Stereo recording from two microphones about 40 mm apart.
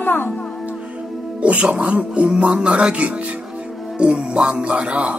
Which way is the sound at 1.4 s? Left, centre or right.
Right.